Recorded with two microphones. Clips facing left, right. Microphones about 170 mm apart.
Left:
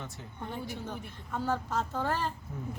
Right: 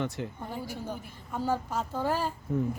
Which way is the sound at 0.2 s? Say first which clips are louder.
Right 12 dB; 75° right (ahead or behind).